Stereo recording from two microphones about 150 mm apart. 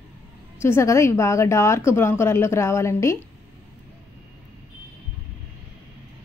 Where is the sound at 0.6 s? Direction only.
20° left (ahead or behind).